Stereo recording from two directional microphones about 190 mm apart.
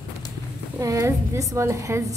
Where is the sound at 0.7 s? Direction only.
15° right (ahead or behind).